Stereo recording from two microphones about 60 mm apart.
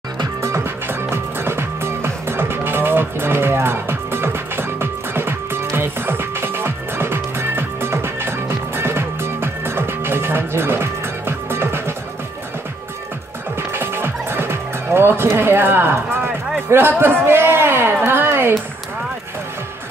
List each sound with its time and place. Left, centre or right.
0.8 s music: right
13.6 s music: right
16.7 s a man's voice: right
18.0 s a sound: right